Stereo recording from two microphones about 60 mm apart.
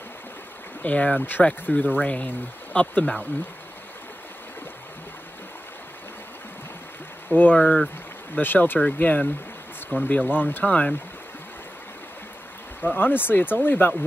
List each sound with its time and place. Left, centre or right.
0.8 s speech: left
7.2 s speech: left
7.5 s speech: centre
8.4 s speech: left
12.8 s speech: left